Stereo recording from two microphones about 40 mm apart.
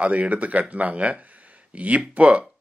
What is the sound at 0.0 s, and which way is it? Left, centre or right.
Speech, right.